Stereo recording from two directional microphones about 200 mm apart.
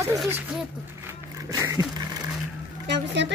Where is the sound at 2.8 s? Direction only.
60° right (ahead or behind).